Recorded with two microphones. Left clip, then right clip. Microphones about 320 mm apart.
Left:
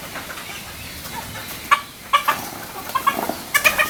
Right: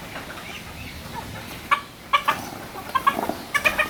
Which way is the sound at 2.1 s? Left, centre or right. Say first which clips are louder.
Left 3 dB; centre.